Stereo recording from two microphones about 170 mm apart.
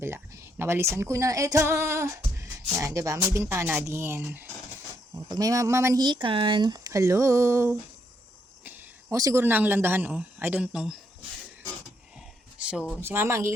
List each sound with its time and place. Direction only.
0.0 s speech: 15° right (ahead or behind)
12.6 s a sound: 5° right (ahead or behind)
13.0 s speech: 15° right (ahead or behind)